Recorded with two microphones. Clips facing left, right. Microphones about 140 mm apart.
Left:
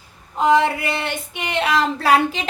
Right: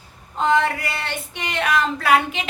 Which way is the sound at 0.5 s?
20° left (ahead or behind).